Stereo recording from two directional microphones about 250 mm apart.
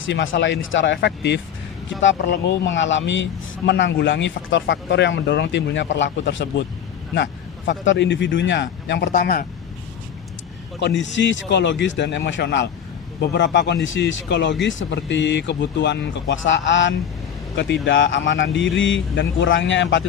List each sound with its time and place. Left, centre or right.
0.1 s speech: left
7.7 s speech: left
10.8 s speech: left